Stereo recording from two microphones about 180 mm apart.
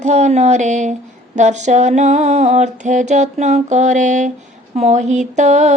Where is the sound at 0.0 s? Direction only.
40° right (ahead or behind).